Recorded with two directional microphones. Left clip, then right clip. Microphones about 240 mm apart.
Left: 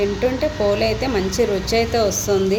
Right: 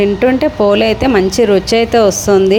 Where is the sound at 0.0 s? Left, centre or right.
Right.